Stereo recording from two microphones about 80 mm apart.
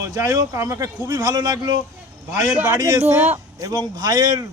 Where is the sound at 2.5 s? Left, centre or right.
Right.